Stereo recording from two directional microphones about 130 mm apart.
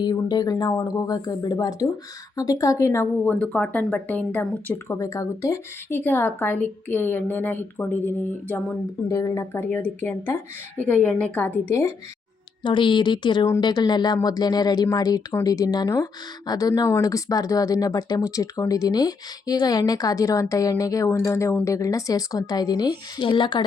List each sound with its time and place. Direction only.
0.0 s speech: 35° left (ahead or behind)
3.3 s speech: 5° left (ahead or behind)
9.0 s speech: 25° left (ahead or behind)
12.6 s speech: 40° left (ahead or behind)